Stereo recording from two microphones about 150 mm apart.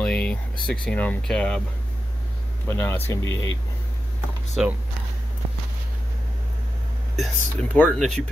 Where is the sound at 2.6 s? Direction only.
15° left (ahead or behind).